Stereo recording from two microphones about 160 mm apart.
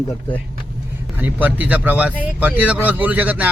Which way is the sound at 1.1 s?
10° right (ahead or behind).